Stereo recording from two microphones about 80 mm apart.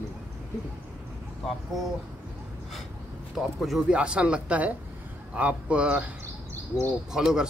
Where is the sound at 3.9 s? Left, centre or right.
Centre.